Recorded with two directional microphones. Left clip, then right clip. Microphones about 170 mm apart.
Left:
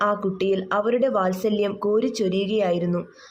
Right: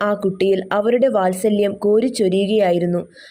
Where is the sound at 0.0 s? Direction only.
25° right (ahead or behind).